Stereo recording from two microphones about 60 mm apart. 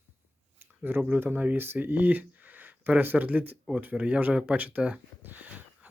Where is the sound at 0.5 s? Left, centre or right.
Right.